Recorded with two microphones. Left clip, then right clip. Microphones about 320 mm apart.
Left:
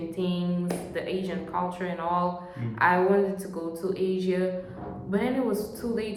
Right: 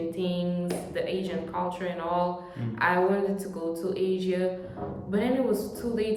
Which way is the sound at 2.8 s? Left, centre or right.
Centre.